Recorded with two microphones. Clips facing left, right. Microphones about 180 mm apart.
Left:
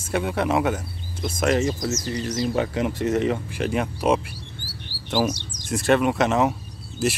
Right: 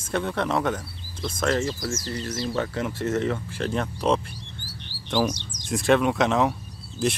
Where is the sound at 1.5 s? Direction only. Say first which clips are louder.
Left 4 dB; 25° left (ahead or behind).